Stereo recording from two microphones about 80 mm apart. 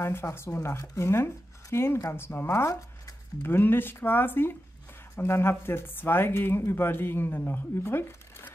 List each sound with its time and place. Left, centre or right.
0.0 s speech: left